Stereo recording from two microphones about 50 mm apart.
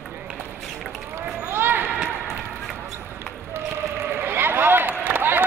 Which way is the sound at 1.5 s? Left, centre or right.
Right.